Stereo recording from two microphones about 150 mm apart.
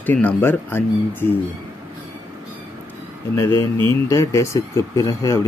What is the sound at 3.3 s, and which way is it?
Speech, 15° left (ahead or behind).